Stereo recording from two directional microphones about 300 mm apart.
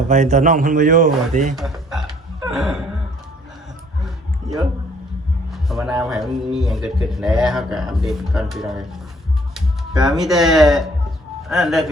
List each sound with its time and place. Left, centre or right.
0.1 s a man's voice: right
1.5 s a sound: centre
5.5 s a man's voice: centre
10.0 s a man's voice: centre